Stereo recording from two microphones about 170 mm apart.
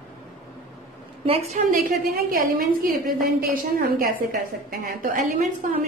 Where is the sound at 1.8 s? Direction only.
60° right (ahead or behind).